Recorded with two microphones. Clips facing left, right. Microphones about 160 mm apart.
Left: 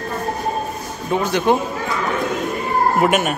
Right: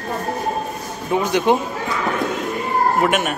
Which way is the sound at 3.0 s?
5° left (ahead or behind).